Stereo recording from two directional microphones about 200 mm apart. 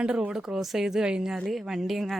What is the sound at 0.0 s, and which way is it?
Speech, 5° right (ahead or behind).